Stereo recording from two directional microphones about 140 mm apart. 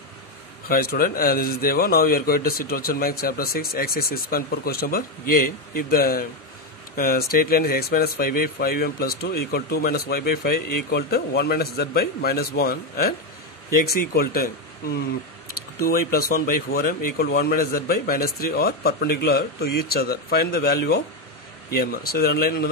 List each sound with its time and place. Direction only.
0.7 s a man's voice: 90° left
14.2 s a man's voice: 90° left
15.5 s a man's voice: 90° left